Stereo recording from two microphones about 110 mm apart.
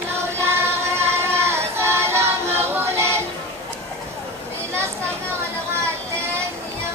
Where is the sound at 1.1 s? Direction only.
25° right (ahead or behind).